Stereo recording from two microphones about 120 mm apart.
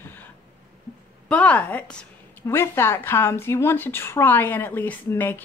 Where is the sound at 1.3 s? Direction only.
10° left (ahead or behind).